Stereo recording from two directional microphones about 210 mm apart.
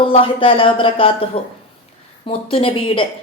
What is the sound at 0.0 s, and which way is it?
A woman's voice, 25° left (ahead or behind).